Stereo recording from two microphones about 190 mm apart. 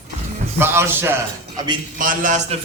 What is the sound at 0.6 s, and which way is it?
Mantra, 10° right (ahead or behind).